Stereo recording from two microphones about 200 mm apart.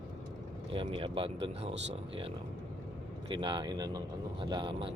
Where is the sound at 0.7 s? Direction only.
25° right (ahead or behind).